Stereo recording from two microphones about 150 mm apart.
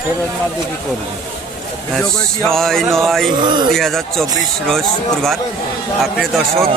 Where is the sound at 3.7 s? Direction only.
Centre (ahead or behind).